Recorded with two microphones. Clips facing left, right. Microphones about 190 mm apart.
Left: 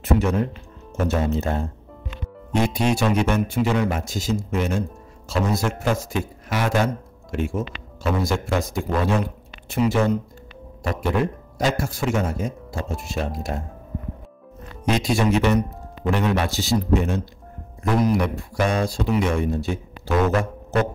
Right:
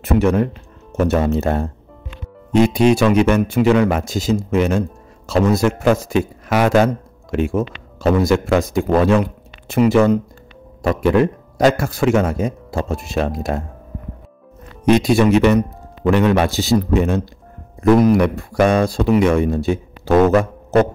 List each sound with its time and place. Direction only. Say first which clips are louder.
0.0 s speech: right 5 dB; 65° right (ahead or behind)
2.6 s a man's voice: right 8 dB; 90° right
14.9 s speech: right 7 dB; 60° right (ahead or behind)
16.0 s a man's voice: right 7 dB; 85° right
17.9 s speech: right 6 dB; 60° right (ahead or behind); by 19.8 s 80° right